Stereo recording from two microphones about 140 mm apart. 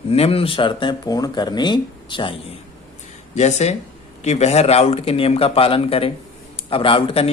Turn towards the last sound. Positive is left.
turn(degrees=40)  # may be behind; listen again after turning